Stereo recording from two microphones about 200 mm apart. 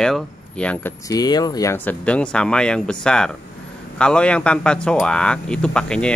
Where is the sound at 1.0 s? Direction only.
20° left (ahead or behind).